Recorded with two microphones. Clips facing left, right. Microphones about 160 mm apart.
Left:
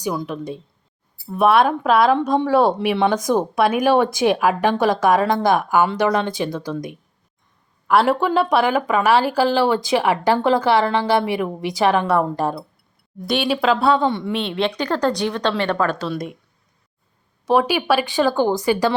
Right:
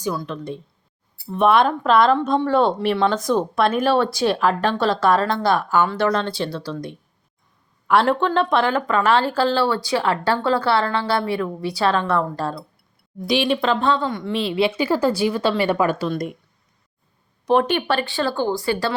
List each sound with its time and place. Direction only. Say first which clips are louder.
0.0 s speech: left 1 dB; 15° left (ahead or behind)
7.9 s speech: left 1 dB; 5° left (ahead or behind)
13.2 s speech: left 1 dB; centre (ahead or behind)
14.0 s a woman's voice: left 5 dB; 25° left (ahead or behind)
14.3 s a woman's voice: right 2 dB; 5° right (ahead or behind)
16.0 s speech: right 1 dB; centre (ahead or behind)
17.4 s speech: left 1 dB; 5° left (ahead or behind)